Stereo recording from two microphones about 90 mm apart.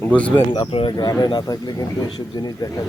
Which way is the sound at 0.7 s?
90° left.